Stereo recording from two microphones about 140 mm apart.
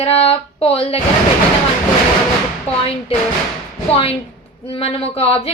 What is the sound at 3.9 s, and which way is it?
A woman's voice, 45° left (ahead or behind).